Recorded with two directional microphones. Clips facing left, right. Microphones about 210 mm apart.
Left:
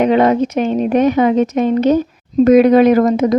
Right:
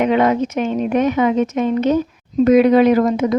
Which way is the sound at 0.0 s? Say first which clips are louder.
Left 3 dB; 35° left (ahead or behind).